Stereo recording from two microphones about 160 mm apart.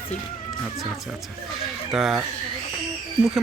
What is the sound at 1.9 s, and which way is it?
Speech, centre (ahead or behind).